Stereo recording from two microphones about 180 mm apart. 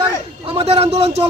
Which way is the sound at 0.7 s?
35° right (ahead or behind).